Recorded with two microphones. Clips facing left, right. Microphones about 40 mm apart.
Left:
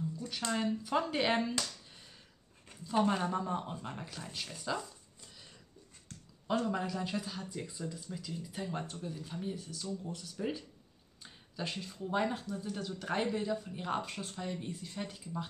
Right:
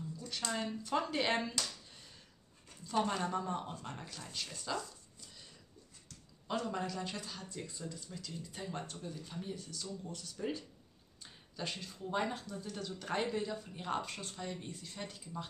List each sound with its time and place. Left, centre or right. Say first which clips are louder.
0.5 s speech: left 4 dB; centre
3.0 s speech: left 3 dB; centre
6.1 s a sound: left 6 dB; left
6.6 s speech: left 3 dB; centre